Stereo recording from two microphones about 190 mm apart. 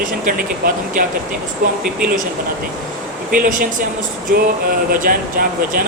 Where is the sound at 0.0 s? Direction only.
50° right (ahead or behind).